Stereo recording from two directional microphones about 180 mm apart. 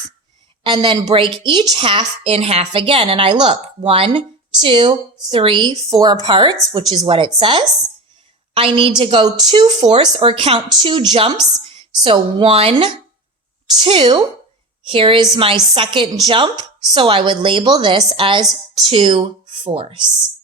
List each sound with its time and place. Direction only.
0.6 s a woman's voice: 25° right (ahead or behind)